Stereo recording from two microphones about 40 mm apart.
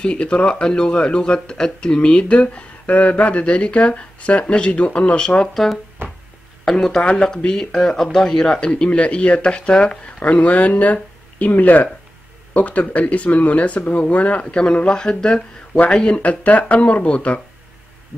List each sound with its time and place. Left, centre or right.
0.0 s speech: left
2.0 s speech: left
5.5 s speech: centre
6.0 s a sound: right
6.6 s speech: centre
7.0 s speech: left
7.5 s speech: centre
10.2 s speech: left
14.4 s speech: centre
16.2 s speech: left